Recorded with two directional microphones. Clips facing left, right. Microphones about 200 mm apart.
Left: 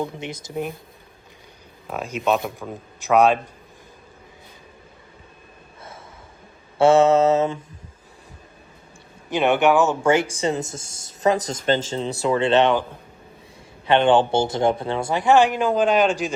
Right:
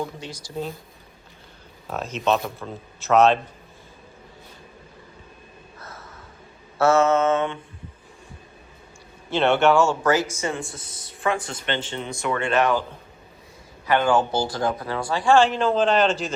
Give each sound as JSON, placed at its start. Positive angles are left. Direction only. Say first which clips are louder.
{"t": 0.0, "sound": "speech", "louder": "left 3 dB", "side_deg": 20}
{"t": 1.9, "sound": "a man's voice", "louder": "left 1 dB", "side_deg": 10}
{"t": 5.8, "sound": "gasp", "louder": "left 2 dB", "side_deg": 25}
{"t": 6.7, "sound": "speech", "louder": "left 4 dB", "side_deg": 30}
{"t": 9.3, "sound": "speech", "louder": "left 1 dB", "side_deg": 15}
{"t": 13.8, "sound": "speech", "louder": "left 4 dB", "side_deg": 30}